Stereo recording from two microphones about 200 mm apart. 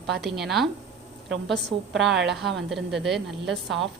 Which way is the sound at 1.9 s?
Centre (ahead or behind).